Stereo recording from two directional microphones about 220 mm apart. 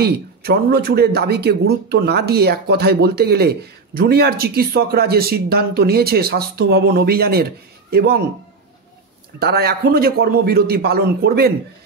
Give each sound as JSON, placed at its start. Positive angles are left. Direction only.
{"t": 0.0, "sound": "speech", "side_deg": -45}
{"t": 9.4, "sound": "speech", "side_deg": -45}